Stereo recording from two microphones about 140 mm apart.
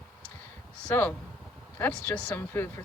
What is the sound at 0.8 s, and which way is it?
Speech, 10° left (ahead or behind).